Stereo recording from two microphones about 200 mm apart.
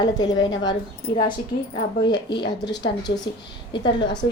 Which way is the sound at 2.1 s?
20° left (ahead or behind).